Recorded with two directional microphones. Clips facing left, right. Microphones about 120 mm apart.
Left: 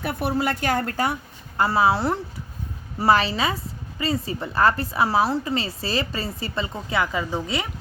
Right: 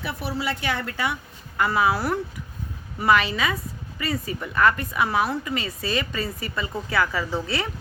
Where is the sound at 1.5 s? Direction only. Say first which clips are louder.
Left 2 dB; 30° left (ahead or behind).